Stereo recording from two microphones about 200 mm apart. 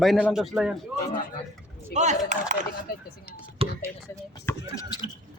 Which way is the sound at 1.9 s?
35° right (ahead or behind).